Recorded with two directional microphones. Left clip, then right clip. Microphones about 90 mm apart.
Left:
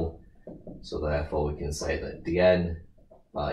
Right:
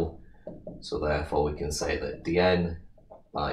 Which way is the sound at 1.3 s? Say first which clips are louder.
Right 3 dB; 20° right (ahead or behind).